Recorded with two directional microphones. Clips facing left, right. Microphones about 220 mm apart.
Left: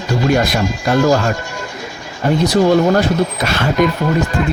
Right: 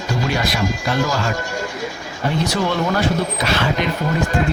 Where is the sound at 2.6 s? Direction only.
40° left (ahead or behind).